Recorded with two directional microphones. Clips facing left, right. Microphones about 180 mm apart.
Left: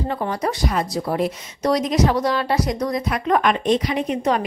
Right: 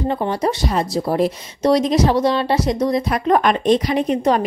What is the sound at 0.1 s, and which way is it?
A woman's voice, 25° right (ahead or behind).